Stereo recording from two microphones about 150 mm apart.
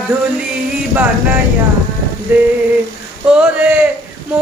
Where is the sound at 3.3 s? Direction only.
10° right (ahead or behind).